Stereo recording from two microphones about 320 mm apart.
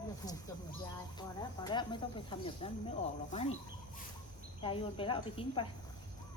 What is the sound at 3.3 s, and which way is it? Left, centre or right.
Speech, centre.